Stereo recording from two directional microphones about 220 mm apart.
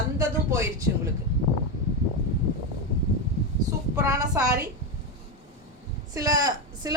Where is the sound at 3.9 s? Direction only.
15° right (ahead or behind).